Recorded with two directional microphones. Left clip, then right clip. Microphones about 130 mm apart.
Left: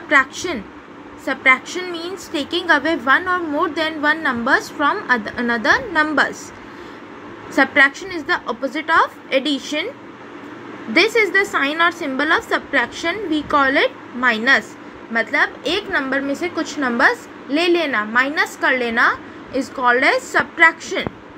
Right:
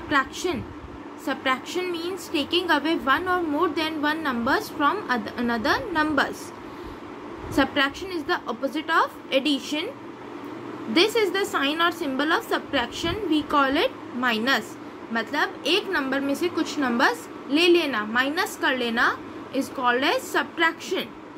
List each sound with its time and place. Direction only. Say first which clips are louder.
0.1 s a woman's voice: left 8 dB; 30° left (ahead or behind)
7.5 s a woman's voice: left 9 dB; 30° left (ahead or behind)
10.9 s a woman's voice: left 6 dB; 25° left (ahead or behind)